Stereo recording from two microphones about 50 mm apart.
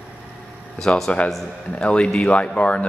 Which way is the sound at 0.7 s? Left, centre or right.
Centre.